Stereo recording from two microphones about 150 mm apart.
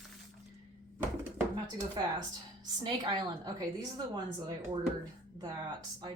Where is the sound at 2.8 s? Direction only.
30° right (ahead or behind).